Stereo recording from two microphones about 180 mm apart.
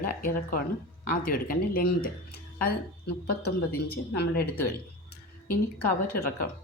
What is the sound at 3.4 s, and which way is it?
Speech, 60° left (ahead or behind).